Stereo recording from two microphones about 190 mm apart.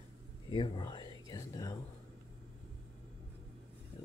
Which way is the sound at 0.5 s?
25° left (ahead or behind).